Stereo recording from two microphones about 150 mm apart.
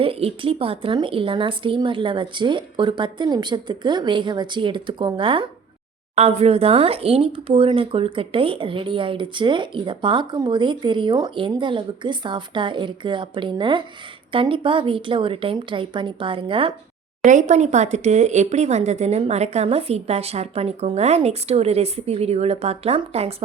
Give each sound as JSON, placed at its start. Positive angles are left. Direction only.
{"t": 0.0, "sound": "speech", "side_deg": -40}
{"t": 17.2, "sound": "speech", "side_deg": -55}